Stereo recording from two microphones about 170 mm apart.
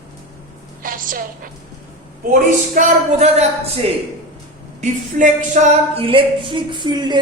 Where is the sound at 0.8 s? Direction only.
55° right (ahead or behind).